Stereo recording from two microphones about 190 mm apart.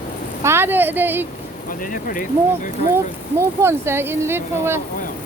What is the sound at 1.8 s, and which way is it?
Speech, 45° left (ahead or behind).